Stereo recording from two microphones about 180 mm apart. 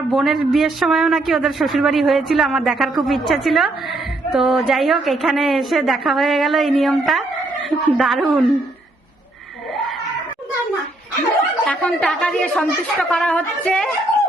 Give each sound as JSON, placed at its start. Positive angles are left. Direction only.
{"t": 0.1, "sound": "a woman's voice", "side_deg": 0}
{"t": 11.6, "sound": "a woman's voice", "side_deg": 5}